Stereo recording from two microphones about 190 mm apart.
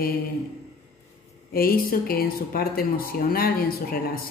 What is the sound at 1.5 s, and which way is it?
Speech, 50° left (ahead or behind).